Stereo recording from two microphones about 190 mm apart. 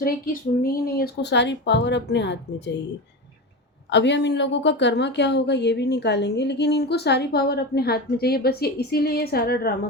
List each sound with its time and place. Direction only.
0.6 s speech: 50° left (ahead or behind); by 2.7 s 65° left (ahead or behind)
3.8 s a woman's voice: 65° left (ahead or behind)